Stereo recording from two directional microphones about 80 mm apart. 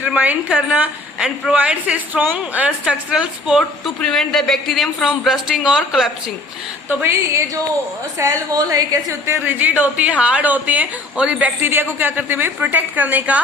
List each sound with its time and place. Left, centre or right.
0.0 s a woman's voice: centre
3.6 s a woman's voice: centre
7.0 s speech: right
8.2 s a woman's voice: right
9.2 s a woman's voice: right
11.6 s a woman's voice: right